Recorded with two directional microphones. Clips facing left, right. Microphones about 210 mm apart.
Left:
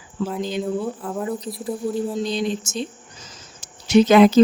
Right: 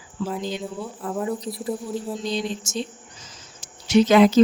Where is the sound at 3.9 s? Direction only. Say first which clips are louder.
Left 2 dB; 55° left (ahead or behind).